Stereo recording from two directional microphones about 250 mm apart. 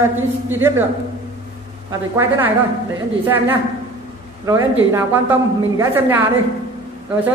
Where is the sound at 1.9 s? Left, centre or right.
Centre.